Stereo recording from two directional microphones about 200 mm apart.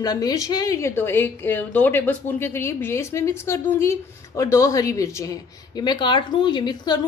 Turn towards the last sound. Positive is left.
turn(degrees=20)  # may be behind; listen again after turning